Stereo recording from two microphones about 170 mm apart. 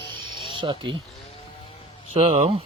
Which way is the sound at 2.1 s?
40° right (ahead or behind).